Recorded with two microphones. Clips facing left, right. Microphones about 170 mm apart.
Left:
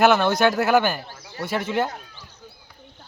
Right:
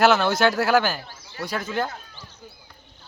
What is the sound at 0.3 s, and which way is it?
Speech, centre (ahead or behind).